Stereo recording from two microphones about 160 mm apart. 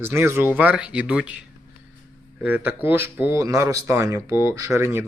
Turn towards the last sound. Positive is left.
turn(degrees=-15)  # may be behind; listen again after turning